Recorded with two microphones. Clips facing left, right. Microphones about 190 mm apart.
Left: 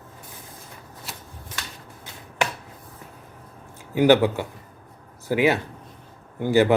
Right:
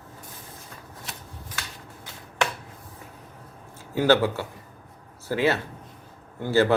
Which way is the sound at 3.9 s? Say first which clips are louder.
Left 4 dB; 15° left (ahead or behind).